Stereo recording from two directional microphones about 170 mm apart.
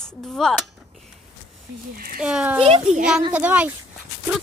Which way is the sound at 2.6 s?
35° right (ahead or behind).